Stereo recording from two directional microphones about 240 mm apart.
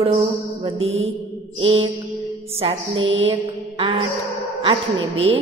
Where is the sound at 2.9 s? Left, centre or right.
Right.